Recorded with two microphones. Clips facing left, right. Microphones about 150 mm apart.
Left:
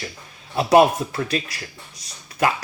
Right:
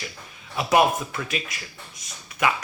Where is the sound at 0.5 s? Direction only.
30° left (ahead or behind).